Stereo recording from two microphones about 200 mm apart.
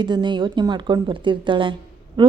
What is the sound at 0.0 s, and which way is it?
A woman's voice, 25° right (ahead or behind).